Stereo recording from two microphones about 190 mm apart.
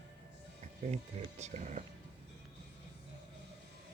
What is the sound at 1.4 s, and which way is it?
Speech, 35° right (ahead or behind).